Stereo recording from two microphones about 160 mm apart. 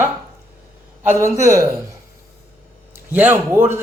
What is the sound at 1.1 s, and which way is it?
Speech, 15° right (ahead or behind).